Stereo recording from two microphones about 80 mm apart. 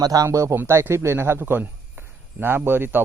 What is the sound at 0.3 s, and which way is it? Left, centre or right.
A man's voice, right.